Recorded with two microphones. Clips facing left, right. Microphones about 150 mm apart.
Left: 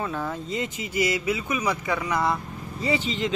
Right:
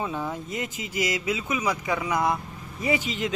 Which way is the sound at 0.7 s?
90° right.